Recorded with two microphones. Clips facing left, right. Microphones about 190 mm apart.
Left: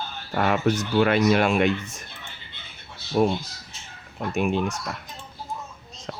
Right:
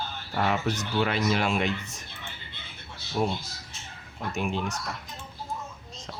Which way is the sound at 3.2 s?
65° left (ahead or behind).